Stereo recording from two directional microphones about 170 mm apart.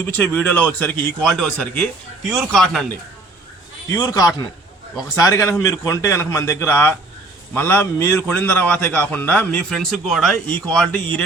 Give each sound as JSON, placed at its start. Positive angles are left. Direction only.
{"t": 0.0, "sound": "a man's voice", "side_deg": 10}
{"t": 3.8, "sound": "a man's voice", "side_deg": 20}